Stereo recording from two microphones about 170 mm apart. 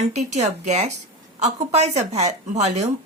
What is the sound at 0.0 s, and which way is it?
Speech, 40° right (ahead or behind).